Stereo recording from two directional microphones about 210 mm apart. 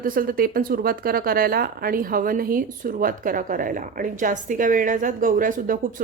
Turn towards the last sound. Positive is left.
turn(degrees=-40)  # may be behind; listen again after turning